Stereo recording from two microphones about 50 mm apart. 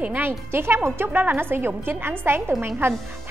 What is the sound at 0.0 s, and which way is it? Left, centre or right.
Speech, right.